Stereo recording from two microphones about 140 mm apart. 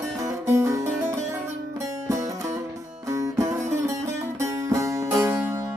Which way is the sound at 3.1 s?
25° right (ahead or behind).